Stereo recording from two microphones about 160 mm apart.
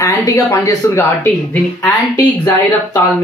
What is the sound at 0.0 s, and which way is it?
Speech, 20° left (ahead or behind).